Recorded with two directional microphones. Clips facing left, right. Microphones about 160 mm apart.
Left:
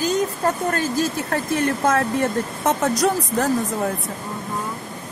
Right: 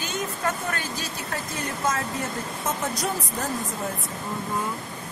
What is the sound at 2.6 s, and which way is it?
Speech, 75° left (ahead or behind).